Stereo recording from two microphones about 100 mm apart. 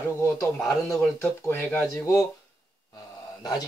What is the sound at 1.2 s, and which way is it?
Speech, 20° left (ahead or behind).